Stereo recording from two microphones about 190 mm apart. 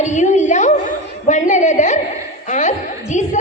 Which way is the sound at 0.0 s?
40° left (ahead or behind).